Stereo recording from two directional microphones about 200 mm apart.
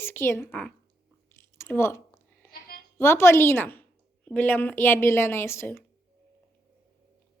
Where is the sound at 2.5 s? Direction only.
50° left (ahead or behind).